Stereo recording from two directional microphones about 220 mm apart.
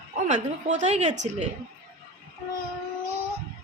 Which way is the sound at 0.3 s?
30° right (ahead or behind).